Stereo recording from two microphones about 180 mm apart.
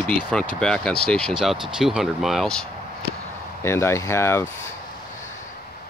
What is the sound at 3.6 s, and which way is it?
Speech, 15° left (ahead or behind).